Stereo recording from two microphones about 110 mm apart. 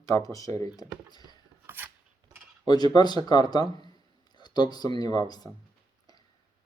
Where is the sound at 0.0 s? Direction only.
35° left (ahead or behind).